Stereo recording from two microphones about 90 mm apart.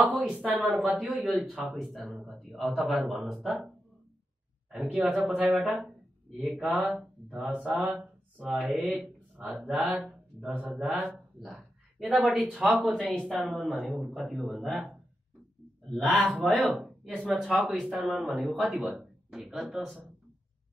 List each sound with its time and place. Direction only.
0.0 s a sound: centre (ahead or behind)
0.3 s speech: 10° right (ahead or behind)
0.7 s speech: centre (ahead or behind)
4.9 s speech: 15° right (ahead or behind)
5.5 s speech: centre (ahead or behind)
7.9 s speech: 10° right (ahead or behind)
13.1 s speech: 10° left (ahead or behind)
13.5 s speech: centre (ahead or behind)
15.9 s speech: 10° left (ahead or behind); by 18.2 s 15° right (ahead or behind)
18.2 s speech: centre (ahead or behind)